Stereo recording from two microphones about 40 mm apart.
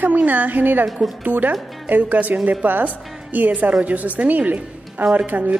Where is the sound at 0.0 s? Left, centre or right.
Right.